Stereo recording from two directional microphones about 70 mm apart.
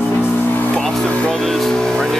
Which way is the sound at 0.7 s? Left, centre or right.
Centre.